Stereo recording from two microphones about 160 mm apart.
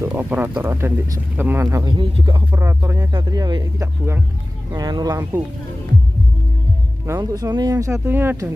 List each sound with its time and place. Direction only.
0.0 s speech: 15° right (ahead or behind); by 2.4 s 30° right (ahead or behind)
2.5 s speech: 15° right (ahead or behind)
7.1 s speech: 20° right (ahead or behind)